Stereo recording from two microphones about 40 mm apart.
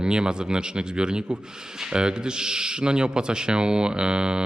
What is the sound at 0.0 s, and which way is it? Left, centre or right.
Speech, right.